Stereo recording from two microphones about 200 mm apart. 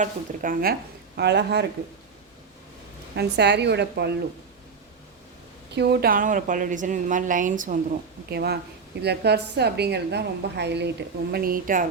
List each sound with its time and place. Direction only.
0.0 s a woman's voice: 45° right (ahead or behind)
3.2 s a woman's voice: 55° right (ahead or behind)
5.7 s a woman's voice: 55° right (ahead or behind)
8.3 s a woman's voice: 55° right (ahead or behind)